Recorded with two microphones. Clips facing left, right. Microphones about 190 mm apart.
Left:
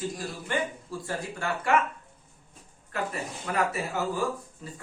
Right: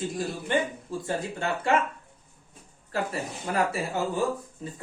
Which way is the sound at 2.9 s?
30° right (ahead or behind).